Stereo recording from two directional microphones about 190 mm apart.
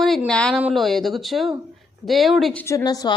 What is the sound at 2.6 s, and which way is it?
Speech, 20° left (ahead or behind).